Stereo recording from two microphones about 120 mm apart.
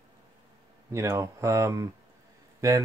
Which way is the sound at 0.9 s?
25° right (ahead or behind).